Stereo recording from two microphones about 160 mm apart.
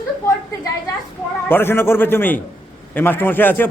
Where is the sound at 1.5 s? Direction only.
15° left (ahead or behind).